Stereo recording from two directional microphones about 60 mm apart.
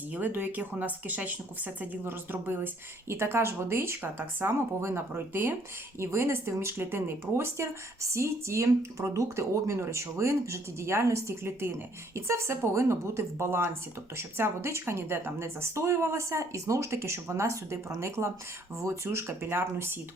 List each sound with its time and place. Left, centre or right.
0.1 s speech: right
6.0 s speech: right